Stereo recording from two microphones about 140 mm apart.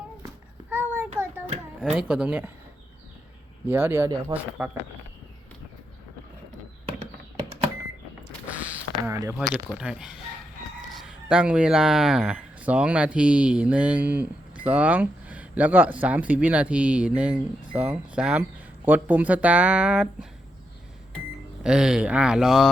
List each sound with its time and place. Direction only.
0.7 s a sound: 15° right (ahead or behind)
1.9 s speech: 5° right (ahead or behind)
3.7 s speech: 15° right (ahead or behind)
8.4 s a sound: 10° right (ahead or behind)
9.6 s speech: 5° right (ahead or behind)
21.6 s speech: 5° right (ahead or behind)